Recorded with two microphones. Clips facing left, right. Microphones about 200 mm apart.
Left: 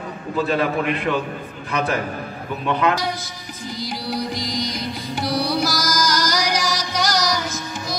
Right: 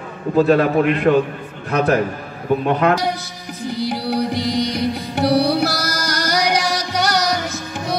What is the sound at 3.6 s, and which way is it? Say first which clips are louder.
Music: right 7 dB; 60° right (ahead or behind).